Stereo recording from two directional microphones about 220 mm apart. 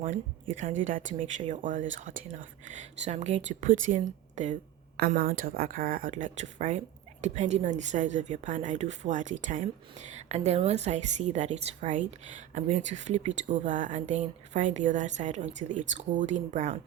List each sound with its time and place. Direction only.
0.5 s speech: 35° right (ahead or behind)